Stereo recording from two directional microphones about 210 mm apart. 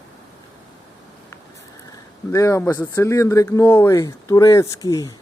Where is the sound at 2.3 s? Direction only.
15° left (ahead or behind).